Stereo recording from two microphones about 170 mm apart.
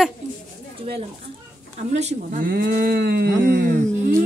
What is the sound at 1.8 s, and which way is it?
Speech, 40° right (ahead or behind).